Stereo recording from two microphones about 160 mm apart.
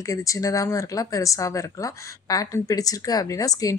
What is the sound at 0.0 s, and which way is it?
Speech, 20° left (ahead or behind).